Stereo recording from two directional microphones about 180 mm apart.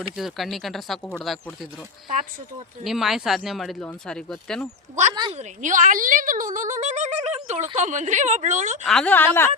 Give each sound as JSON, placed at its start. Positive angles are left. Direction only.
{"t": 0.2, "sound": "speech", "side_deg": 0}
{"t": 2.8, "sound": "speech", "side_deg": 0}
{"t": 5.1, "sound": "a woman's voice", "side_deg": -25}
{"t": 5.4, "sound": "speech", "side_deg": -45}
{"t": 8.8, "sound": "a woman's voice", "side_deg": 5}